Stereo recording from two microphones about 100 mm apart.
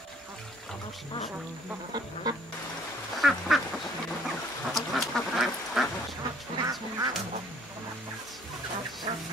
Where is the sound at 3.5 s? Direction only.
Centre (ahead or behind).